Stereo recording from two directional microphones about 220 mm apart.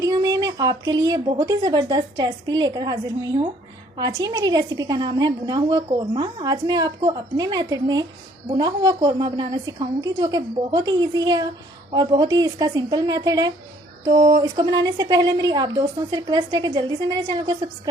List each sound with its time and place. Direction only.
0.0 s a woman's voice: 15° right (ahead or behind)